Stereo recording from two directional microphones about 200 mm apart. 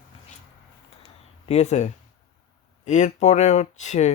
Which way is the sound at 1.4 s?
35° left (ahead or behind).